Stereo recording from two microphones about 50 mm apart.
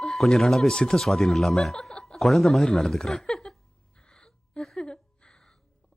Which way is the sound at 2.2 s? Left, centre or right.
Centre.